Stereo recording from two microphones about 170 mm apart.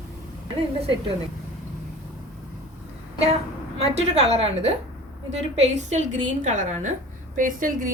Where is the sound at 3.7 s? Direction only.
40° right (ahead or behind).